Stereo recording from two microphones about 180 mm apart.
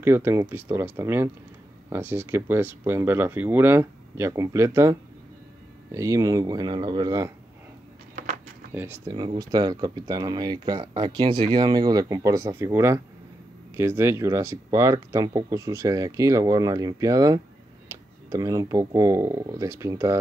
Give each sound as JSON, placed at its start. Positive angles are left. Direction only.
{"t": 0.0, "sound": "speech", "side_deg": -15}
{"t": 8.7, "sound": "speech", "side_deg": -10}
{"t": 9.1, "sound": "speech", "side_deg": -25}